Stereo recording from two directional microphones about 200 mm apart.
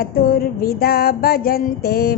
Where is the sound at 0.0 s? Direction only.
45° left (ahead or behind).